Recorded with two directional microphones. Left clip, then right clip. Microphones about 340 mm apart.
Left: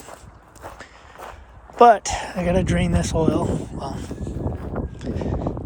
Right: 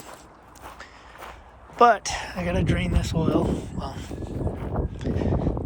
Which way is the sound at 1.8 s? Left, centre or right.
Centre.